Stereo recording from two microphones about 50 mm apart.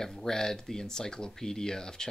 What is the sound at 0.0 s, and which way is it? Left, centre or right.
Speech, centre.